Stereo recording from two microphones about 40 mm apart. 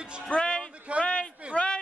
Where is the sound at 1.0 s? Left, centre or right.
Left.